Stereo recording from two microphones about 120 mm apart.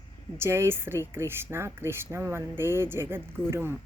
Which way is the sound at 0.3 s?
20° right (ahead or behind).